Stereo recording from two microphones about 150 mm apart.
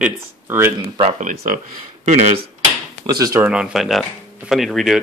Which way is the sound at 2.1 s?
50° right (ahead or behind).